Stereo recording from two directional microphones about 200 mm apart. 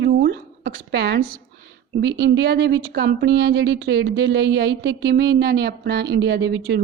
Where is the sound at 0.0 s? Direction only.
50° right (ahead or behind).